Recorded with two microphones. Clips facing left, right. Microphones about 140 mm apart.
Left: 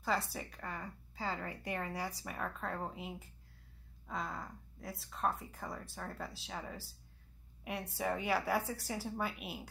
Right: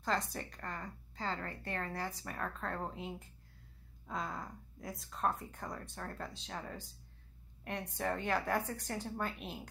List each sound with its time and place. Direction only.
0.0 s a woman's voice: 5° left (ahead or behind)
7.9 s a woman's voice: 5° left (ahead or behind)